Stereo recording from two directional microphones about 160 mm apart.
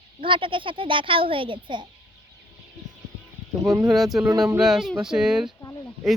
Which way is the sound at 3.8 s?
Centre (ahead or behind).